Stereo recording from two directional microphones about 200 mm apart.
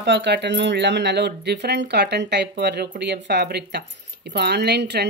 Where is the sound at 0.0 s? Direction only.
60° right (ahead or behind).